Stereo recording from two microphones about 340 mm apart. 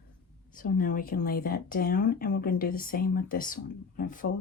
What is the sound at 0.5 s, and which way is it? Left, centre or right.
Speech, left.